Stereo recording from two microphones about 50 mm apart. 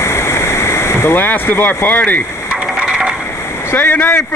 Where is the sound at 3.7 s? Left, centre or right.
Left.